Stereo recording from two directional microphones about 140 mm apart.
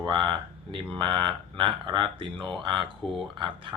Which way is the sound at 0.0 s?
35° right (ahead or behind).